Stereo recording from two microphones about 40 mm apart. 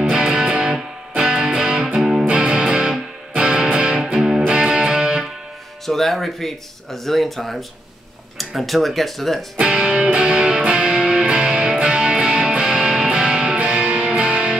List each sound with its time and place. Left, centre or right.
0.1 s music: right
4.0 s music: centre
5.9 s speech: centre
10.1 s music: right
10.6 s music: right
10.9 s music: centre
11.2 s music: right
13.6 s music: right